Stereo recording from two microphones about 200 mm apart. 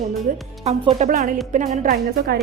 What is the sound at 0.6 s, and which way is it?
Speech, 30° right (ahead or behind).